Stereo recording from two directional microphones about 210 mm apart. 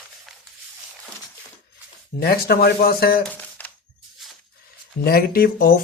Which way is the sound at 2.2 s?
50° left (ahead or behind).